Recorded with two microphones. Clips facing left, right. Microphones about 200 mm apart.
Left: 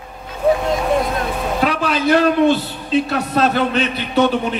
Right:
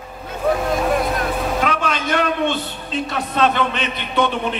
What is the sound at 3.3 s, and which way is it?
A man's voice, 40° left (ahead or behind).